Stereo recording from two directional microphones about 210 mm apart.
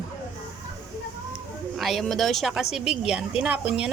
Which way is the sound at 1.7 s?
Centre (ahead or behind).